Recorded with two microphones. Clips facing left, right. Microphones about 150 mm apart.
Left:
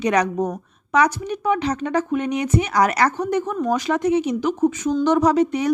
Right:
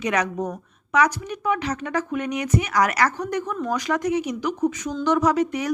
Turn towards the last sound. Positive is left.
turn(degrees=30)  # may be behind; listen again after turning